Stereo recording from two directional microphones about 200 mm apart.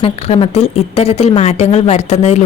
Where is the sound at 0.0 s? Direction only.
30° left (ahead or behind).